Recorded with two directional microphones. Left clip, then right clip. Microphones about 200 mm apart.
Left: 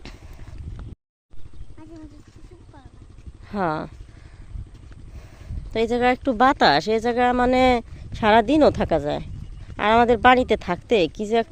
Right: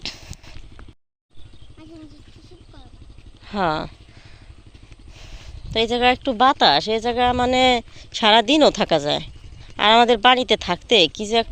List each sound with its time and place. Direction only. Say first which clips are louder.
3.4 s speech: right 3 dB; 10° left (ahead or behind)
5.6 s speech: right 2 dB; 15° left (ahead or behind)
7.9 s speech: right 2 dB; 10° left (ahead or behind)